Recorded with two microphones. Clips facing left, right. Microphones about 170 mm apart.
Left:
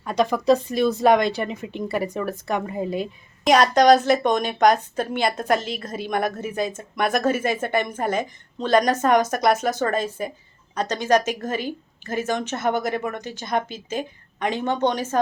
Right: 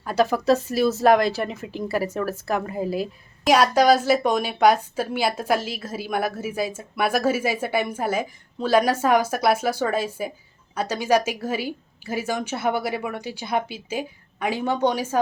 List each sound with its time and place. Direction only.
0.0 s speech: 5° right (ahead or behind)